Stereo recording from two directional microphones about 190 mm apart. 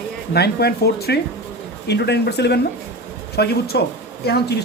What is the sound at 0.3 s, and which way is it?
Speech, 55° left (ahead or behind).